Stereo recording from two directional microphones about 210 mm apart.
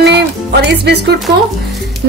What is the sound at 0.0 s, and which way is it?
Music, 50° right (ahead or behind).